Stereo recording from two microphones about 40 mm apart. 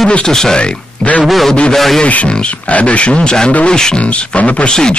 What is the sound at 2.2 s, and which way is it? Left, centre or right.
Speech, left.